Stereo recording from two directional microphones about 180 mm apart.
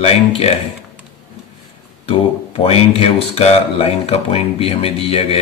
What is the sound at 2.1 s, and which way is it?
Speech, 35° left (ahead or behind).